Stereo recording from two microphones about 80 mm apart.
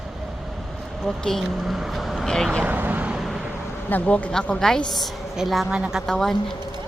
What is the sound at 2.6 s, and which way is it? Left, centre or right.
Vehicle, right.